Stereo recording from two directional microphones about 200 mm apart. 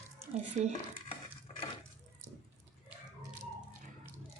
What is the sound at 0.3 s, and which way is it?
Speech, 35° right (ahead or behind).